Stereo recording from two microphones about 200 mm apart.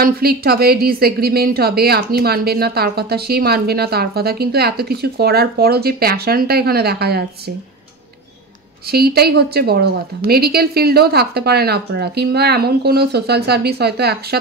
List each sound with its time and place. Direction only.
0.0 s a woman's voice: 50° right (ahead or behind)
8.8 s a woman's voice: 50° right (ahead or behind)